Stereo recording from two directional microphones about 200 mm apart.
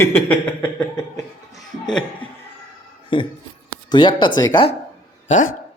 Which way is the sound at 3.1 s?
25° left (ahead or behind).